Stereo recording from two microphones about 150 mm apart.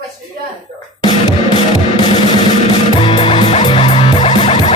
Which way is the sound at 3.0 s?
35° left (ahead or behind).